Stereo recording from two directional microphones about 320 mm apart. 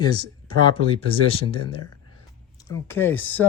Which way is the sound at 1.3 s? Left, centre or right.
Centre.